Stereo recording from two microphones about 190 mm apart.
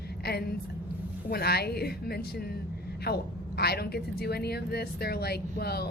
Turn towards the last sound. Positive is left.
turn(degrees=55)  # may be behind; listen again after turning